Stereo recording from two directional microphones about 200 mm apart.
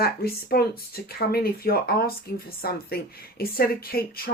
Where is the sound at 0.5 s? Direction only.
50° left (ahead or behind).